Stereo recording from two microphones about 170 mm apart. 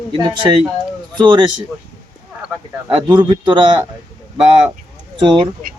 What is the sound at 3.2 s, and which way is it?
Speech, 25° right (ahead or behind).